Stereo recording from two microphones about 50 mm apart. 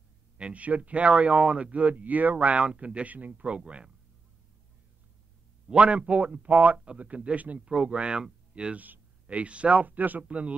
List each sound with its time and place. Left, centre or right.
0.4 s speech: right
3.4 s speech: right
5.7 s speech: right
7.6 s speech: centre
8.7 s speech: right